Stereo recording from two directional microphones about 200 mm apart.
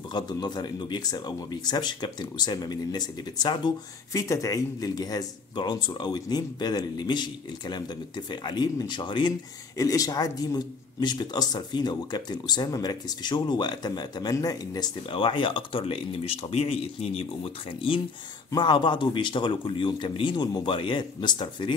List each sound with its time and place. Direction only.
0.1 s a man's voice: 20° left (ahead or behind)